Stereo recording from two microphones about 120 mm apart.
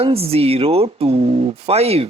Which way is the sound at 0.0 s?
55° right (ahead or behind).